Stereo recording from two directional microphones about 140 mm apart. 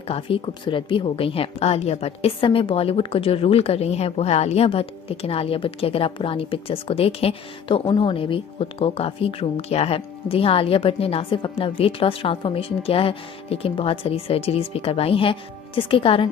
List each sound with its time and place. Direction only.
0.1 s a woman's voice: 40° left (ahead or behind)